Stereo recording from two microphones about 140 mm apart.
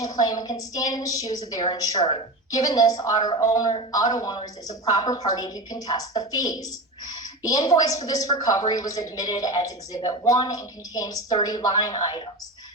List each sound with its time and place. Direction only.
0.0 s a woman's voice: 25° left (ahead or behind)